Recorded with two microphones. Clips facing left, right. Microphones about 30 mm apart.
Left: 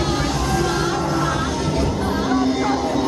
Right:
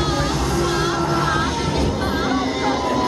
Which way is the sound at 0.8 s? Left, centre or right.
Right.